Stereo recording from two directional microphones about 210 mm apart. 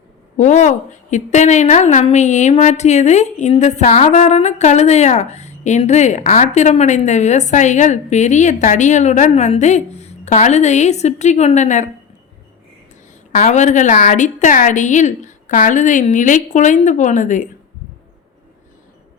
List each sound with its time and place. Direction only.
0.3 s a woman's voice: 35° left (ahead or behind)
13.4 s a woman's voice: 35° left (ahead or behind)